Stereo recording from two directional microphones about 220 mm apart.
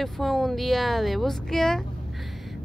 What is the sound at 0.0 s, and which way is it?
Speech, centre (ahead or behind).